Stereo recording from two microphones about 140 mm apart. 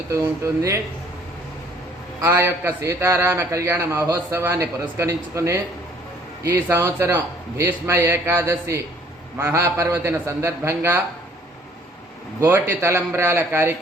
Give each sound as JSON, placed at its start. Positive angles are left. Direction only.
{"t": 0.1, "sound": "a man's voice", "side_deg": -20}
{"t": 2.2, "sound": "a man's voice", "side_deg": -20}
{"t": 12.4, "sound": "a man's voice", "side_deg": -20}